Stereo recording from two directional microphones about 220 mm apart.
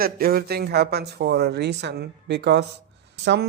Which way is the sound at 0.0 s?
40° right (ahead or behind).